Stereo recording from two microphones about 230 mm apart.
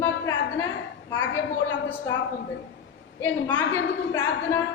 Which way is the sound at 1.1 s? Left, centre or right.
Centre.